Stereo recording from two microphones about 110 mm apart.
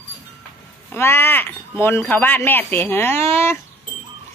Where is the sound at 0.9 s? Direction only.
20° left (ahead or behind).